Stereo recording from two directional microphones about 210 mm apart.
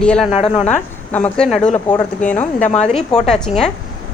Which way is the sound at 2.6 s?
30° left (ahead or behind).